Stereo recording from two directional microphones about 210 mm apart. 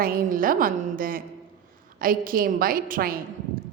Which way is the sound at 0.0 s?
45° right (ahead or behind).